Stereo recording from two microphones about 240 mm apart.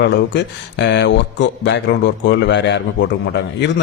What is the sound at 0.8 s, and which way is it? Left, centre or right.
A man's voice, left.